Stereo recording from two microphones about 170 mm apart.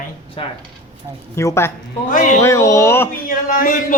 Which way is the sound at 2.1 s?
50° left (ahead or behind).